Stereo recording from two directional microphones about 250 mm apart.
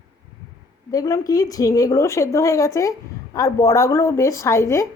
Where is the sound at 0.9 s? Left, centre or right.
Centre.